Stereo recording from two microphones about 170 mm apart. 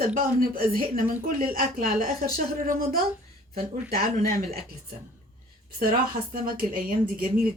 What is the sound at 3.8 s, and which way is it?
Speech, 65° right (ahead or behind).